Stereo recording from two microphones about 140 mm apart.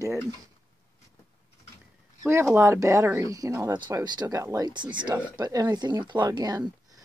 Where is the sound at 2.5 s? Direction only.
20° right (ahead or behind).